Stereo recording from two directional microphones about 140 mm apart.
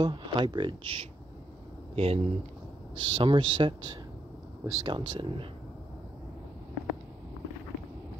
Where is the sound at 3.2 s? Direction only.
40° right (ahead or behind).